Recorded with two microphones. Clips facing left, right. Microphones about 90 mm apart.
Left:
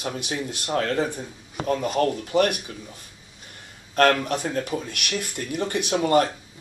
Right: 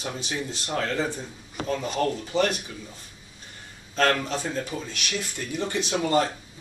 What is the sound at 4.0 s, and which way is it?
Speech, 60° left (ahead or behind).